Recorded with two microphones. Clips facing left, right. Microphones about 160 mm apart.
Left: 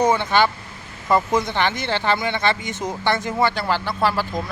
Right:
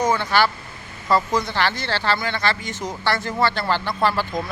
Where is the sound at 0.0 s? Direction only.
20° left (ahead or behind).